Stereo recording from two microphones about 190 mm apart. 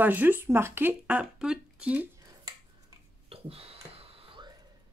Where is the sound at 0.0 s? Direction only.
10° right (ahead or behind).